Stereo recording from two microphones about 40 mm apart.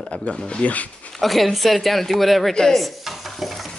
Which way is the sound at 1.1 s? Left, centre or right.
Centre.